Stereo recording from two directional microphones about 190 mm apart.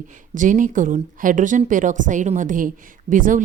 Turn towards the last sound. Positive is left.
turn(degrees=-45)  # may be behind; listen again after turning